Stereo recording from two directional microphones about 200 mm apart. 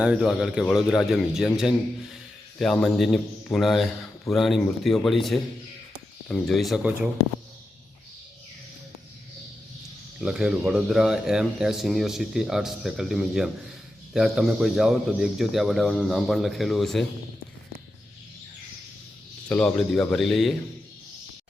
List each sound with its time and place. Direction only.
0.0 s a man's voice: 5° right (ahead or behind)
10.2 s a man's voice: 5° right (ahead or behind)
19.5 s a man's voice: 5° left (ahead or behind)